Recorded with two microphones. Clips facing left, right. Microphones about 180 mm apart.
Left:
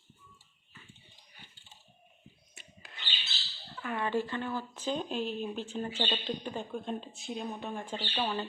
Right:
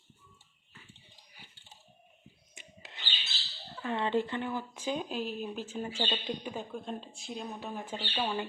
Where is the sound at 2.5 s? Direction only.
25° right (ahead or behind).